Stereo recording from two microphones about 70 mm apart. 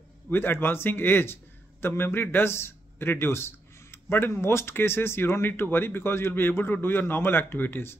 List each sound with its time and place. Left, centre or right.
0.3 s a man's voice: left